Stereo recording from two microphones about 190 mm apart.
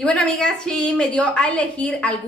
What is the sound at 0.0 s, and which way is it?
A woman's voice, 5° left (ahead or behind).